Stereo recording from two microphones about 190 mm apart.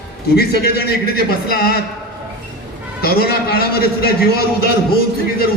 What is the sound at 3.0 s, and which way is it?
A man's voice, 55° left (ahead or behind).